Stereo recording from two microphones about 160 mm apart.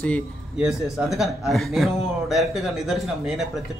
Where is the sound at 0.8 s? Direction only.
Centre (ahead or behind).